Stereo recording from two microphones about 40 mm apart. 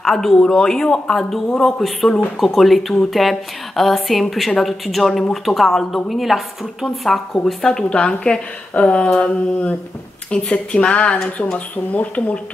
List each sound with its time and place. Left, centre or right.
0.0 s a woman's voice: centre
7.4 s a woman's voice: centre
11.5 s speech: left